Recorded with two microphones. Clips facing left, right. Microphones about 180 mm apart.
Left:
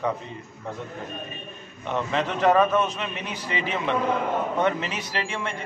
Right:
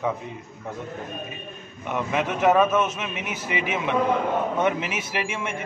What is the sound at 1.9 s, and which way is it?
Speech, 15° right (ahead or behind).